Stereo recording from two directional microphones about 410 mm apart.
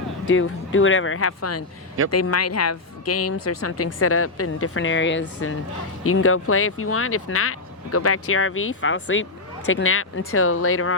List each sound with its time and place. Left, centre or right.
0.3 s speech: left